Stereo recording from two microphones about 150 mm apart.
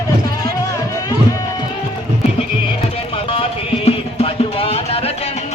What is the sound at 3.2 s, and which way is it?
Music, 40° left (ahead or behind).